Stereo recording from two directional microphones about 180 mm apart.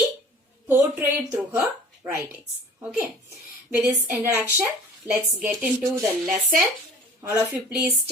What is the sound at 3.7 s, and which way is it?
Speech, 10° right (ahead or behind).